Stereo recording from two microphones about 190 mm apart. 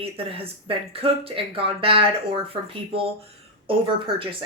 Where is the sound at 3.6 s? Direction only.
30° right (ahead or behind).